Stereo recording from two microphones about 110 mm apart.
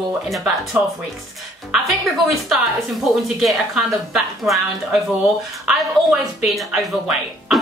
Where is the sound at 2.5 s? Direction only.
Centre (ahead or behind).